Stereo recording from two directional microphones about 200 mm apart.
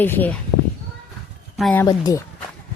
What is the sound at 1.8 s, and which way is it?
Speech, 20° left (ahead or behind).